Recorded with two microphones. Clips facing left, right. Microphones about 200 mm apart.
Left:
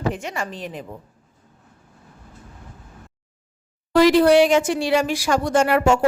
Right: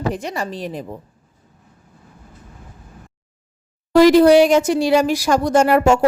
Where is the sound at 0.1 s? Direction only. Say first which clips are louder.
Right 3 dB; 35° right (ahead or behind).